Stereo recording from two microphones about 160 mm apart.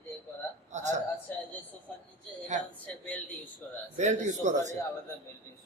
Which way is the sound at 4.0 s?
50° right (ahead or behind).